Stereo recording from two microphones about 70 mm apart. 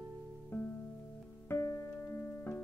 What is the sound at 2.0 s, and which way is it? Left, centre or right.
Music, left.